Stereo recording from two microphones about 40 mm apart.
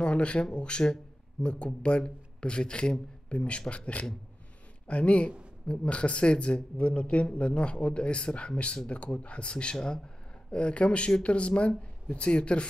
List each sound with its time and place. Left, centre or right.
0.0 s a man's voice: left